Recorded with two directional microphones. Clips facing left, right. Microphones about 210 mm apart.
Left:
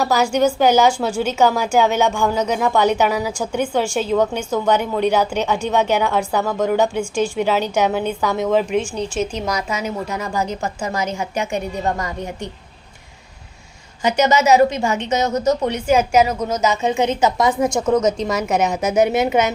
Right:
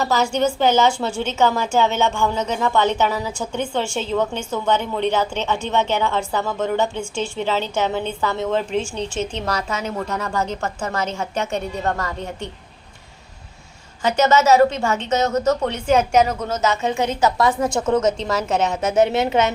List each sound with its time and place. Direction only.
0.0 s a woman's voice: 10° left (ahead or behind)
14.0 s a woman's voice: 15° left (ahead or behind)